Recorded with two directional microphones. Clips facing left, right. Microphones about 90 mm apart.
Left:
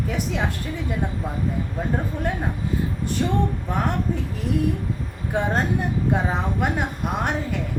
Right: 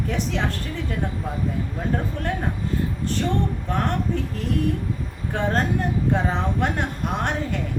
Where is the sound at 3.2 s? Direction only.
15° left (ahead or behind).